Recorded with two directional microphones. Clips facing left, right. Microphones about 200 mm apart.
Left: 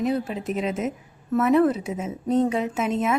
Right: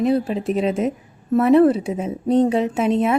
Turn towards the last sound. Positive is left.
turn(degrees=-30)  # may be behind; listen again after turning